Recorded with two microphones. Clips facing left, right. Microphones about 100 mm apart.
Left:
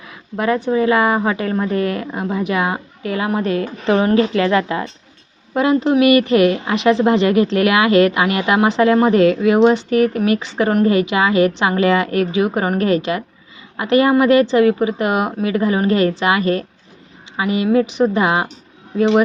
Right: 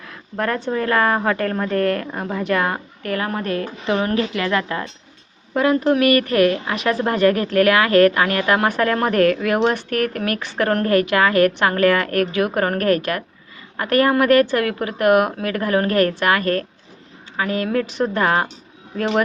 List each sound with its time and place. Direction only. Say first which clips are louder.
0.1 s a woman's voice: left 4 dB; 10° left (ahead or behind)
9.1 s speech: left 3 dB; 60° right (ahead or behind)
9.5 s a woman's voice: left 6 dB; 15° left (ahead or behind)